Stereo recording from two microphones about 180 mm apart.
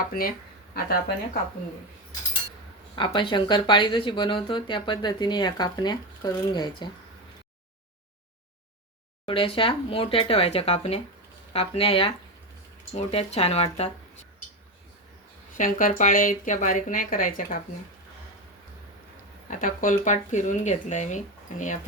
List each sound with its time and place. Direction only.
0.0 s speech: 55° left (ahead or behind)
2.9 s speech: 25° left (ahead or behind)
9.2 s speech: 30° left (ahead or behind)
15.5 s speech: 45° left (ahead or behind)
19.5 s speech: 45° left (ahead or behind)